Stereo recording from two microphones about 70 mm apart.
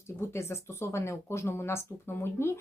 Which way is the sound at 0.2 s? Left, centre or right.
Left.